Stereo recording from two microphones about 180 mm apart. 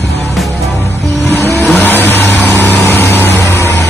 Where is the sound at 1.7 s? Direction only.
10° left (ahead or behind).